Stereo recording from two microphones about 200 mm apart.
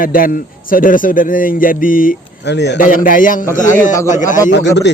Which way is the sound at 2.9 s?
45° left (ahead or behind).